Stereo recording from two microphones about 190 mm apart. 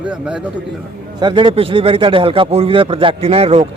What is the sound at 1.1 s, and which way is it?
A man's voice, 25° right (ahead or behind).